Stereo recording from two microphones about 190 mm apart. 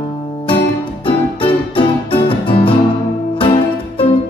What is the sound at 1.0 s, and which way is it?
Music, 30° left (ahead or behind).